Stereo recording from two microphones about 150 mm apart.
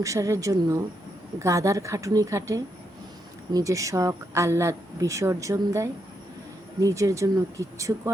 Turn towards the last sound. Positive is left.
turn(degrees=-20)  # may be behind; listen again after turning